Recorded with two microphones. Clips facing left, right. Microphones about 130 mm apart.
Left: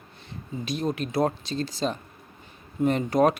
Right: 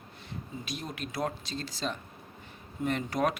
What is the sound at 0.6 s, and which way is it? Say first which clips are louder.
Speech: left 13 dB; 30° left (ahead or behind).